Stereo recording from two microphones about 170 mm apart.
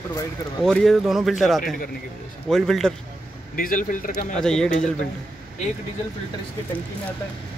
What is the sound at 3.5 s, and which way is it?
Speech, 55° left (ahead or behind).